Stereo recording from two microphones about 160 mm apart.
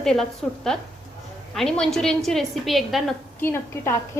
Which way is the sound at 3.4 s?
15° left (ahead or behind).